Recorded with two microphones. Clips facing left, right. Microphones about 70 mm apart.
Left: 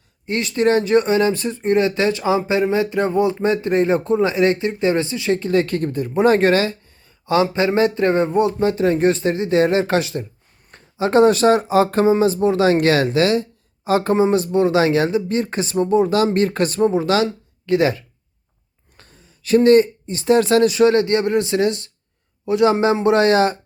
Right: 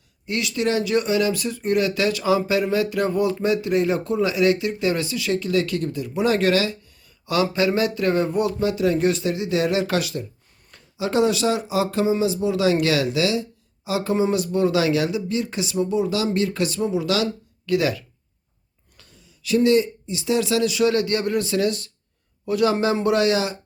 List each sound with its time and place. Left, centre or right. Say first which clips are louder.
0.3 s speech: left 5 dB; left
14.2 s a man's voice: left 4 dB; left